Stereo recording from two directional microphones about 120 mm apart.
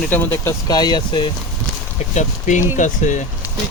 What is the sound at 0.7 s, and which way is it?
Speech, 35° left (ahead or behind).